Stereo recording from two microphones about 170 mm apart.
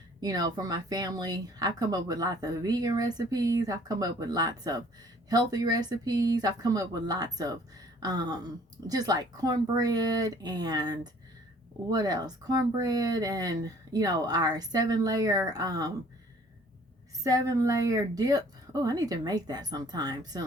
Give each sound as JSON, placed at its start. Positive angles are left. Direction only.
{"t": 0.2, "sound": "speech", "side_deg": -25}
{"t": 17.2, "sound": "speech", "side_deg": -20}